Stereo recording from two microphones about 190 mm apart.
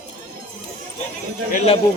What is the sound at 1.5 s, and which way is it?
Speech, 35° left (ahead or behind).